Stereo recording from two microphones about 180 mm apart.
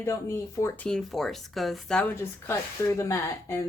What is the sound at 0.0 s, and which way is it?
Speech, 15° left (ahead or behind).